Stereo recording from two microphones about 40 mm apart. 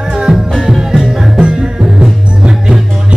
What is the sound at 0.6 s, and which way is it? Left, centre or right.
Music, centre.